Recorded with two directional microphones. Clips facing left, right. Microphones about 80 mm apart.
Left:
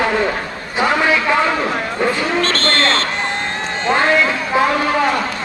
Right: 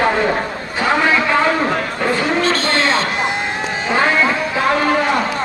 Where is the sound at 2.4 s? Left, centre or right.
Centre.